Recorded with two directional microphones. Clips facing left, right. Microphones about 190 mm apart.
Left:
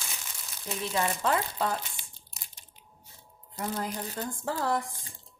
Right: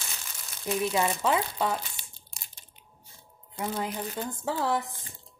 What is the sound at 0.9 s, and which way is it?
Speech, 10° right (ahead or behind).